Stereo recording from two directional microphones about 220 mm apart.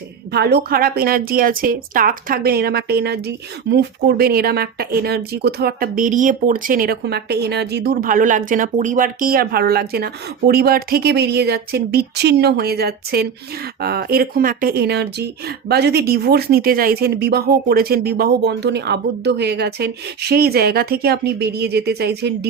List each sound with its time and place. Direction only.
0.3 s a woman's voice: 45° right (ahead or behind)